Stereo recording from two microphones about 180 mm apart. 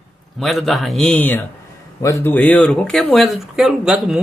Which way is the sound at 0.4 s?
Centre (ahead or behind).